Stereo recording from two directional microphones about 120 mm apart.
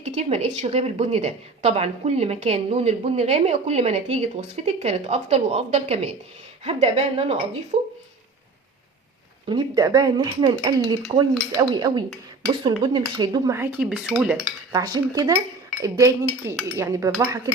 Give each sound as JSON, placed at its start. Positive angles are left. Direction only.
{"t": 0.0, "sound": "a woman's voice", "side_deg": -65}
{"t": 9.5, "sound": "speech", "side_deg": -35}
{"t": 13.5, "sound": "speech", "side_deg": -15}
{"t": 14.7, "sound": "speech", "side_deg": -30}